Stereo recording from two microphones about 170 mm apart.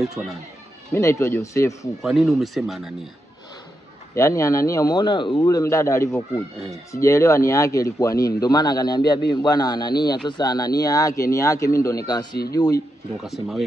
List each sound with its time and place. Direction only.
0.2 s speech: 10° right (ahead or behind)
0.9 s speech: 15° left (ahead or behind)
2.0 s speech: centre (ahead or behind)
4.1 s speech: 20° left (ahead or behind)
13.2 s speech: centre (ahead or behind)